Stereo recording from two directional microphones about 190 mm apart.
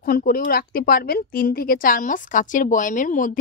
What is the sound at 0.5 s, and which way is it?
A woman's voice, 50° left (ahead or behind).